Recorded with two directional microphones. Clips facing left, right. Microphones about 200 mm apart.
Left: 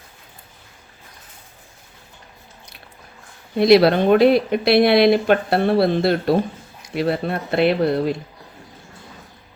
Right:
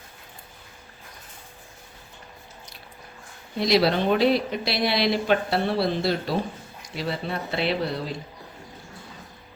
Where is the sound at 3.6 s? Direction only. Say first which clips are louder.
Left 8 dB; 60° left (ahead or behind).